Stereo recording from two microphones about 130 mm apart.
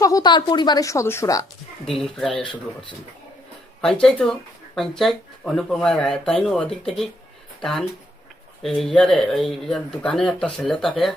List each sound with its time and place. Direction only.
0.0 s a woman's voice: 30° left (ahead or behind)
1.8 s speech: centre (ahead or behind)
3.8 s speech: 5° left (ahead or behind)